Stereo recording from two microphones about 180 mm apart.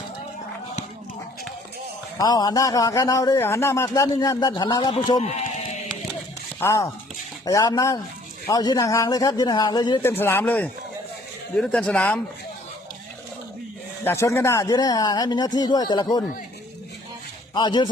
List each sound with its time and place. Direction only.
2.1 s a man's voice: 20° left (ahead or behind)
6.6 s a man's voice: 15° left (ahead or behind)
10.0 s a man's voice: 15° left (ahead or behind)
14.0 s a man's voice: 15° left (ahead or behind)
17.5 s a man's voice: 25° left (ahead or behind)